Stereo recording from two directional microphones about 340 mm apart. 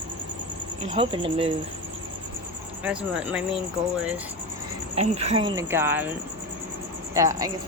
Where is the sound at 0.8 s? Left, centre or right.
Centre.